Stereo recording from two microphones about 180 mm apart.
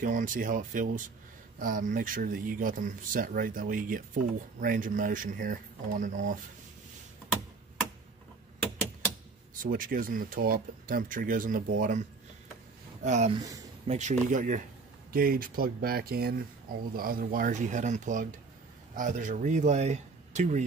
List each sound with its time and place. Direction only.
0.0 s speech: 45° right (ahead or behind)
9.6 s speech: 50° right (ahead or behind)